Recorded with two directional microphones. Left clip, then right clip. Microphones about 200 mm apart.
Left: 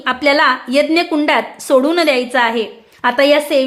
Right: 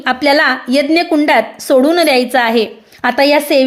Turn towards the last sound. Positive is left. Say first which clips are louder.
# right 2 dB
turn(degrees=-20)  # may be behind; listen again after turning